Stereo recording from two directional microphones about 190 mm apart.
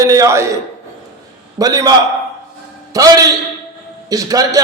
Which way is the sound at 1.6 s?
20° right (ahead or behind).